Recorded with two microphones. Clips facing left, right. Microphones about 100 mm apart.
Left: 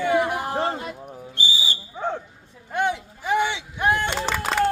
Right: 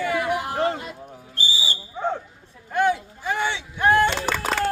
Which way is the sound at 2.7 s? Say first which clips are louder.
Right 3 dB; 20° left (ahead or behind).